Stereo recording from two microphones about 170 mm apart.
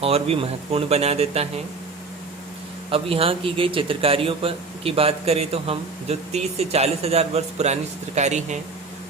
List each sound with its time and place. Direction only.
0.0 s a man's voice: 35° right (ahead or behind)
2.9 s a man's voice: 35° right (ahead or behind)